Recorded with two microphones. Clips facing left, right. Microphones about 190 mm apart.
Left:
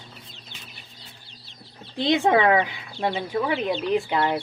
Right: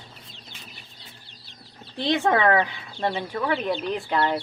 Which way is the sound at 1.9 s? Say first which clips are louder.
Left 2 dB; 15° left (ahead or behind).